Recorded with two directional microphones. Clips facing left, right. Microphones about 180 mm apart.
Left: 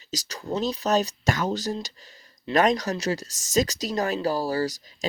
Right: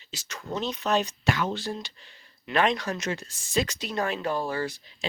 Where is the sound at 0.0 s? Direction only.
40° left (ahead or behind).